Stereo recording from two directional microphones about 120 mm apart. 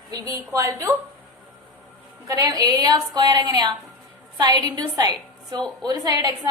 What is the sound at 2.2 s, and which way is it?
A woman's voice, 30° right (ahead or behind).